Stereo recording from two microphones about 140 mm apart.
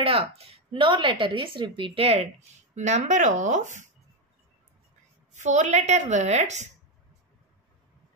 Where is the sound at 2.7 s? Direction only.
55° right (ahead or behind).